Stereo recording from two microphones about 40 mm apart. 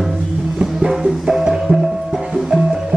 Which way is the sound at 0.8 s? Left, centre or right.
Centre.